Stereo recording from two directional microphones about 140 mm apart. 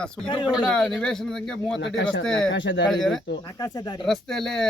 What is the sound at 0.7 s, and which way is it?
Speech, 5° left (ahead or behind).